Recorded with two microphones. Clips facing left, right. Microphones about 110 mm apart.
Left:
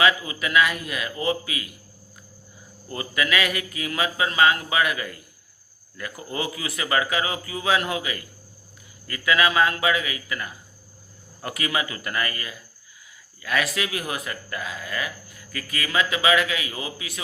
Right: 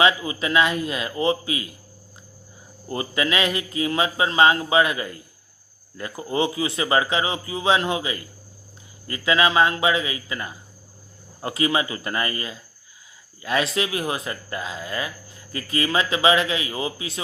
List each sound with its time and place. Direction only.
0.0 s speech: 25° right (ahead or behind)
2.9 s speech: 25° right (ahead or behind)